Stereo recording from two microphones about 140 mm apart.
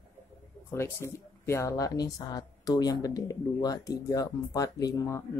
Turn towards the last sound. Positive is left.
turn(degrees=25)  # may be behind; listen again after turning